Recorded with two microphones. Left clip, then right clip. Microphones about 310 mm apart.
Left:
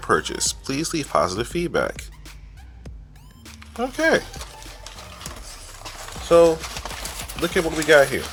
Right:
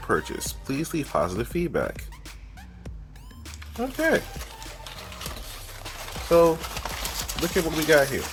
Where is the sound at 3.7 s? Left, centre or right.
Left.